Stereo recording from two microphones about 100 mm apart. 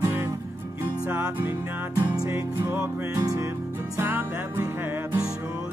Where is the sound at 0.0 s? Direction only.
25° right (ahead or behind).